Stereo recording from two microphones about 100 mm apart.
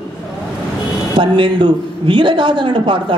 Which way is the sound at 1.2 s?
50° right (ahead or behind).